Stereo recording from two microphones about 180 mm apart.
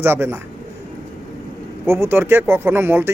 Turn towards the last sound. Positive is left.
turn(degrees=-15)  # may be behind; listen again after turning